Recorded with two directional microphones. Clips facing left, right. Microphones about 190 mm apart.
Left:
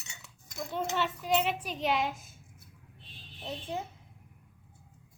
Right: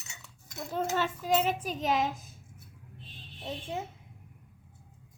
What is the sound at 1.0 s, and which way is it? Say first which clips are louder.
Child singing: even; 45° right (ahead or behind).